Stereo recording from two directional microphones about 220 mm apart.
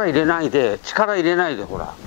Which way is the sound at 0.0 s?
15° left (ahead or behind).